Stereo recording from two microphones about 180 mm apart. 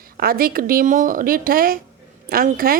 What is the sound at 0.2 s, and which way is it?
A woman's voice, 55° right (ahead or behind).